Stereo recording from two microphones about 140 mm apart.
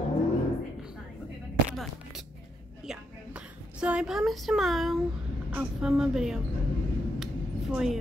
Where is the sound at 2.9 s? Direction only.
10° right (ahead or behind).